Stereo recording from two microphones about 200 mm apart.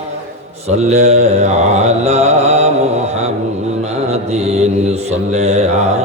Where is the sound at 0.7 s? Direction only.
35° right (ahead or behind).